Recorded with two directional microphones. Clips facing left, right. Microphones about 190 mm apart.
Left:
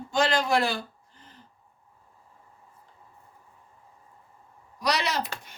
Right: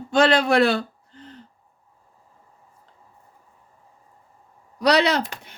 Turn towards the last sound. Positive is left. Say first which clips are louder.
# right 9 dB
turn(degrees=-65)  # may be behind; listen again after turning